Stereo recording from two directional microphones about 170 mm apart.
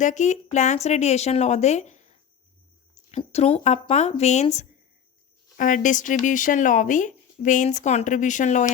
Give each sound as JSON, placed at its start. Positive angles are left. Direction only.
{"t": 0.0, "sound": "speech", "side_deg": 45}